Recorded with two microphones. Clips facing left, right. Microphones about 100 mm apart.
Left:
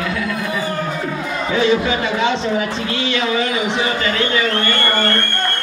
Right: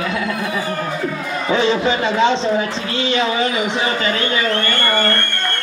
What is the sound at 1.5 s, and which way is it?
Run, 20° right (ahead or behind).